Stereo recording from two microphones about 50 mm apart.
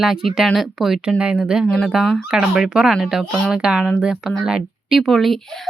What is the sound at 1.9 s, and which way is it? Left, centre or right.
A woman's voice, centre.